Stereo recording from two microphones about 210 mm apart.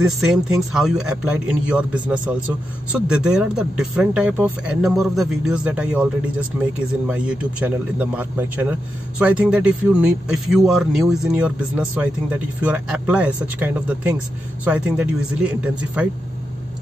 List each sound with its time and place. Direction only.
0.0 s speech: centre (ahead or behind)